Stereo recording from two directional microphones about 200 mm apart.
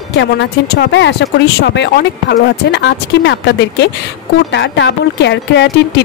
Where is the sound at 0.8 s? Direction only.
60° left (ahead or behind).